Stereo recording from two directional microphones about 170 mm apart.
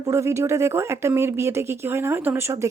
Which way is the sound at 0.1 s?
15° right (ahead or behind).